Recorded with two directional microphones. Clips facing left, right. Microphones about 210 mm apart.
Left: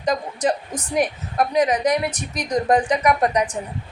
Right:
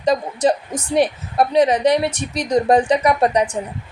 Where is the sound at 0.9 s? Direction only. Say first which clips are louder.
Right 4 dB; 30° right (ahead or behind).